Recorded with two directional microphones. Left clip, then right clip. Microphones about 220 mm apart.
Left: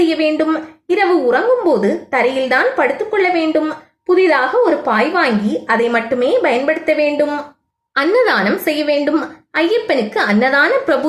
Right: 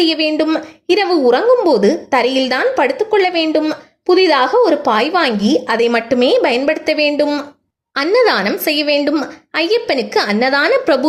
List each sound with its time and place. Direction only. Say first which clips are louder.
0.0 s a woman's voice: even; 50° right (ahead or behind)